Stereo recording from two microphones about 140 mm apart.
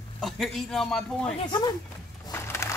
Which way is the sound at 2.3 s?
20° left (ahead or behind).